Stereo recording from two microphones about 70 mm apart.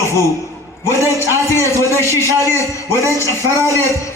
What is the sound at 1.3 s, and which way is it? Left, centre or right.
A man's voice, left.